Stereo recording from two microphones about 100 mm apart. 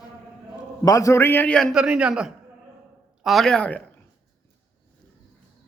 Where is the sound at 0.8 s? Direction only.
35° left (ahead or behind); by 1.6 s 20° left (ahead or behind).